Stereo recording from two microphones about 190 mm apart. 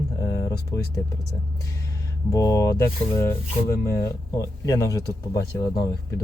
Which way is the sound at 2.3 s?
20° left (ahead or behind).